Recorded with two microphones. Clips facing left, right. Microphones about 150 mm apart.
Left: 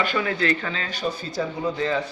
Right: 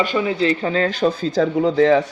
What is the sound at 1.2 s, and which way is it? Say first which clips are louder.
Speech: right 9 dB; 80° right.